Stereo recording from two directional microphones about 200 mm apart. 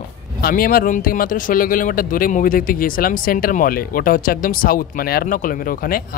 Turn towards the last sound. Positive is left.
turn(degrees=45)  # may be behind; listen again after turning